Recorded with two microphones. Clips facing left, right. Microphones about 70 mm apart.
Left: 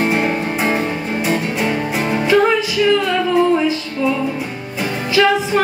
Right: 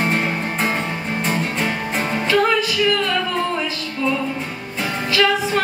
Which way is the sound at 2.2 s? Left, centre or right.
Centre.